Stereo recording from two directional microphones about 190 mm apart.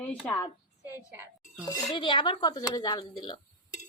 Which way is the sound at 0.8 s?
10° right (ahead or behind).